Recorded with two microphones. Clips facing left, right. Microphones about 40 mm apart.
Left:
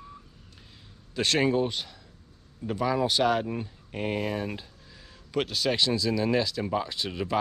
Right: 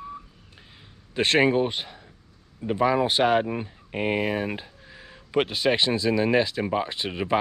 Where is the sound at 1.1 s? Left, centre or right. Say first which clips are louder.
Right 4 dB; right.